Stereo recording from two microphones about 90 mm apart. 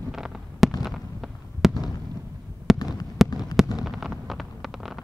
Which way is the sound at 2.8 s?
45° left (ahead or behind).